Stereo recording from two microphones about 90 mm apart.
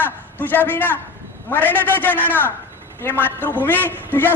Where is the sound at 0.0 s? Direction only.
20° left (ahead or behind).